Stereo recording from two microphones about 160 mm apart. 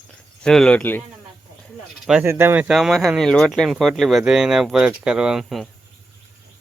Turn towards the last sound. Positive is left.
turn(degrees=0)  # may be behind; listen again after turning